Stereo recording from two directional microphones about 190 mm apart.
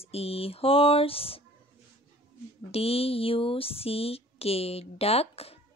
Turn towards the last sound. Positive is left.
turn(degrees=30)  # may be behind; listen again after turning